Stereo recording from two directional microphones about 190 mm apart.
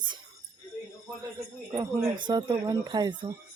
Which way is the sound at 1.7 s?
20° right (ahead or behind).